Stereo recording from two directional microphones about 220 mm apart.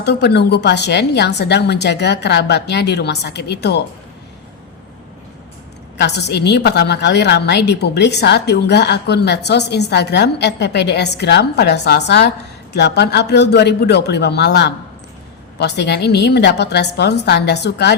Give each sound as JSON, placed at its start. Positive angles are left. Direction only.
{"t": 0.0, "sound": "a woman's voice", "side_deg": 50}
{"t": 6.0, "sound": "a woman's voice", "side_deg": 50}